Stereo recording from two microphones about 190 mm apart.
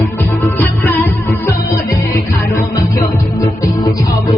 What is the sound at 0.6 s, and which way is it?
Music, 10° left (ahead or behind).